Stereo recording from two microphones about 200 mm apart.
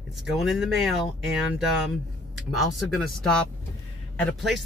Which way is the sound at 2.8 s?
5° left (ahead or behind).